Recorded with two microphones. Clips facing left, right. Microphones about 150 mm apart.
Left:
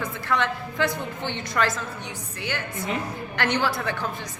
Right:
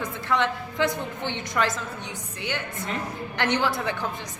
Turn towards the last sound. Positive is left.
turn(degrees=-20)  # may be behind; listen again after turning